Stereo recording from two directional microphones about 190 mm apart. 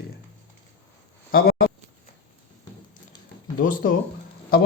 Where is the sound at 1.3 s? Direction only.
50° left (ahead or behind).